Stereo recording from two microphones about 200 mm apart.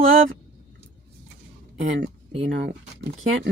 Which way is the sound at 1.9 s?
65° right (ahead or behind).